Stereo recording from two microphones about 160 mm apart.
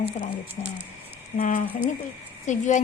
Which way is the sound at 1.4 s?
50° left (ahead or behind).